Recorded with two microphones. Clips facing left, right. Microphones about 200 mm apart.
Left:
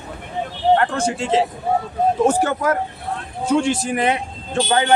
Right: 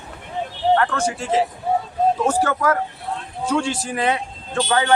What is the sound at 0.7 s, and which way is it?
Speech, 25° left (ahead or behind).